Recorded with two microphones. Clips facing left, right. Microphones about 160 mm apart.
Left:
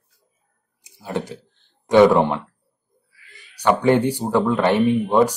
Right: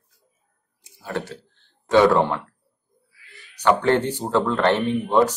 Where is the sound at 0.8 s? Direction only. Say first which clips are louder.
Left 2 dB; 20° left (ahead or behind).